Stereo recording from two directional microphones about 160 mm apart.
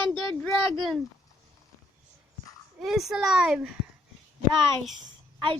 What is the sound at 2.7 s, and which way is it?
A child's voice, centre (ahead or behind).